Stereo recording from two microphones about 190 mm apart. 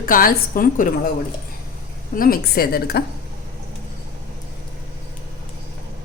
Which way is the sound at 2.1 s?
50° left (ahead or behind).